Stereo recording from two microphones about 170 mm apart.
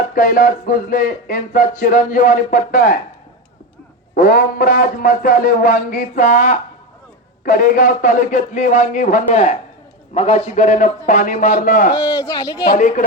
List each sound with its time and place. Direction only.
0.1 s speech: 55° left (ahead or behind)
4.1 s speech: 60° left (ahead or behind)
12.1 s speech: 20° left (ahead or behind)
12.7 s speech: 50° left (ahead or behind)